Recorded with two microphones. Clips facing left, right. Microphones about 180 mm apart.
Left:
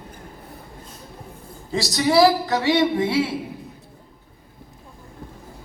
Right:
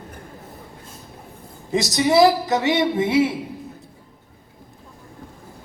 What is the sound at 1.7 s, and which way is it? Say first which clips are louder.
Speech: right 2 dB; 20° right (ahead or behind).